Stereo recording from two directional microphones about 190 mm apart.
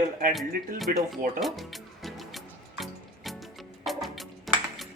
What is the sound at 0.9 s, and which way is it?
Speech, 50° right (ahead or behind).